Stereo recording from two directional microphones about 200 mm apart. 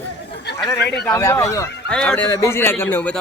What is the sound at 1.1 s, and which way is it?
Speech, 15° left (ahead or behind).